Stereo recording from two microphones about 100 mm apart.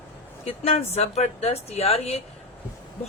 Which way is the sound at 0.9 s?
90° left.